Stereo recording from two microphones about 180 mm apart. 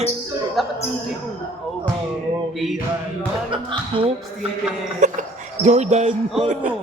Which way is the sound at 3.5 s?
30° right (ahead or behind).